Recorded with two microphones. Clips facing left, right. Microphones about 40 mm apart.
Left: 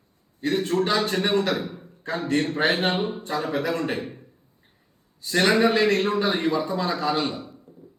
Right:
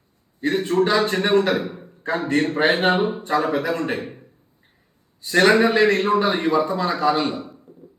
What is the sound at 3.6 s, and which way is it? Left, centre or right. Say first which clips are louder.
Speech: right 2 dB; centre.